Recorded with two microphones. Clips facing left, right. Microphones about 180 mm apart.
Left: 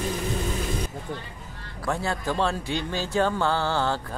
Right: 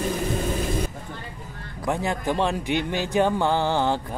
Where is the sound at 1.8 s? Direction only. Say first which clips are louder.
Right 2 dB; 15° right (ahead or behind).